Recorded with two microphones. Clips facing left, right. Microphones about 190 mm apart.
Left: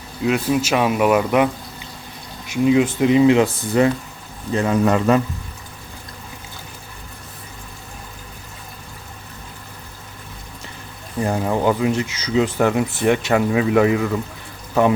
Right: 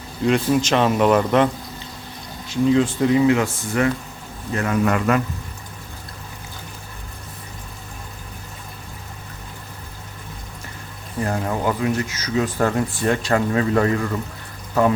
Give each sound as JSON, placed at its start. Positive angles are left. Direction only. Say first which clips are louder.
{"t": 0.2, "sound": "speech", "louder": "right 1 dB", "side_deg": 5}
{"t": 2.6, "sound": "speech", "louder": "left 2 dB", "side_deg": 15}
{"t": 11.2, "sound": "speech", "louder": "left 3 dB", "side_deg": 20}